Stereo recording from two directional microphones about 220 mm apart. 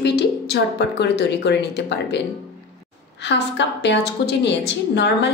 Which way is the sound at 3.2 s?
50° left (ahead or behind).